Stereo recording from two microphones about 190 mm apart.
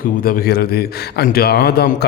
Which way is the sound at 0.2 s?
50° left (ahead or behind).